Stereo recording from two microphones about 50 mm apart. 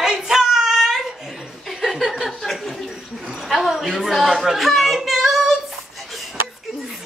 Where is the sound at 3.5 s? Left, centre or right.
Centre.